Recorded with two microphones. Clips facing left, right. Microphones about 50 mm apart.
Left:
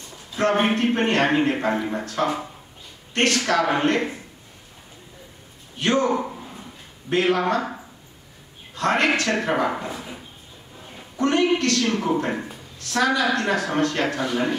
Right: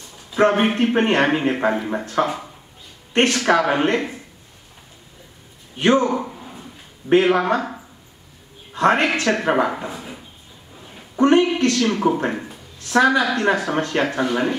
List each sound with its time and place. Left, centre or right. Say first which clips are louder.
0.3 s a man's voice: right 4 dB; right
5.8 s speech: right 5 dB; right
6.0 s a sound: even; centre
7.1 s speech: right 5 dB; right
8.7 s speech: right 3 dB; right
9.8 s speech: right 1 dB; centre
11.1 s speech: right 5 dB; right
12.3 s speech: right 1 dB; centre
12.9 s speech: right 4 dB; right